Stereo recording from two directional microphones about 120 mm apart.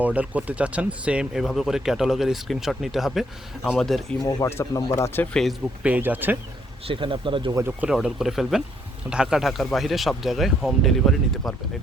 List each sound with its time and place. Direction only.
0.0 s speech: 10° right (ahead or behind)
4.2 s speech: 30° left (ahead or behind)
5.3 s speech: centre (ahead or behind)
5.8 s speech: 15° right (ahead or behind)
6.8 s speech: 45° right (ahead or behind)
7.5 s speech: 20° right (ahead or behind)
7.9 s speech: 5° right (ahead or behind)